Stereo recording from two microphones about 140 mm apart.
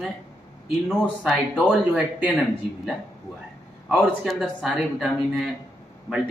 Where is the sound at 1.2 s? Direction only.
5° right (ahead or behind).